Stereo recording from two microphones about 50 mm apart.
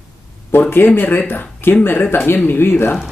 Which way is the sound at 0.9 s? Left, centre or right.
Left.